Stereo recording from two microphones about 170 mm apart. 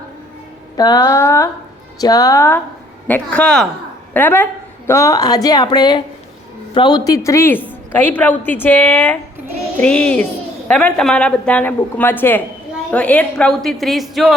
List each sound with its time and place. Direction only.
0.8 s a woman's voice: 25° left (ahead or behind)
3.1 s a woman's voice: 5° left (ahead or behind)